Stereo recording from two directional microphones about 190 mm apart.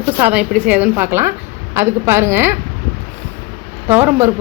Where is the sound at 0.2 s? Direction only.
5° right (ahead or behind).